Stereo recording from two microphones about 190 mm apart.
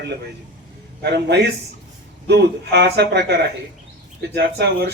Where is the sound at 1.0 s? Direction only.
60° right (ahead or behind).